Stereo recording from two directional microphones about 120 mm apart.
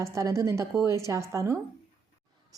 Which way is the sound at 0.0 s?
25° right (ahead or behind).